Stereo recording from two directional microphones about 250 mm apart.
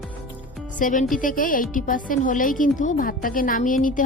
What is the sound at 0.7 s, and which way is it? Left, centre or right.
A woman's voice, left.